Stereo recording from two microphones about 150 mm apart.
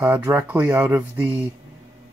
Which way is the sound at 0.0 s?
10° right (ahead or behind).